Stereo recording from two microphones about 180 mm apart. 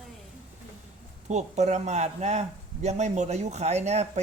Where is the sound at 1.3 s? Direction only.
40° right (ahead or behind).